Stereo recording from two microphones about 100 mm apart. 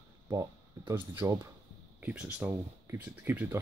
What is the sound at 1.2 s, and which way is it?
Speech, 20° right (ahead or behind).